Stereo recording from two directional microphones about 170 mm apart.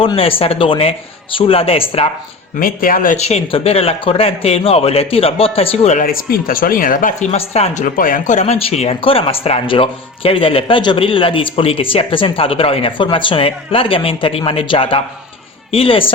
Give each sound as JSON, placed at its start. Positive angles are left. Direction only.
{"t": 0.0, "sound": "speech", "side_deg": 30}
{"t": 2.6, "sound": "speech", "side_deg": 55}
{"t": 3.2, "sound": "speech", "side_deg": 35}
{"t": 6.0, "sound": "speech", "side_deg": 55}
{"t": 7.3, "sound": "speech", "side_deg": 35}